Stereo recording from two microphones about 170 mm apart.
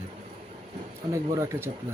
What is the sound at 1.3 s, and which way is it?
Speech, 15° right (ahead or behind).